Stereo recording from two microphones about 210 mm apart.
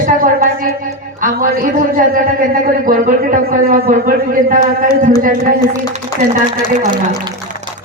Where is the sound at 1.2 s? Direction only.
40° right (ahead or behind).